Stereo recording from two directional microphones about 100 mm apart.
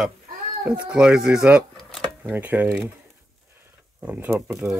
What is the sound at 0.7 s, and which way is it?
Speech, 10° right (ahead or behind).